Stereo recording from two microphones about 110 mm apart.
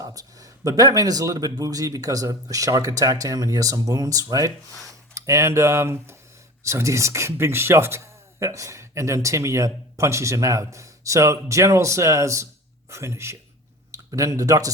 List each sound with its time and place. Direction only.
0.0 s speech: 35° right (ahead or behind)